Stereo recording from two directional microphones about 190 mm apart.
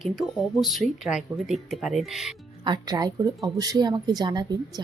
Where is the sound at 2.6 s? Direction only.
20° right (ahead or behind).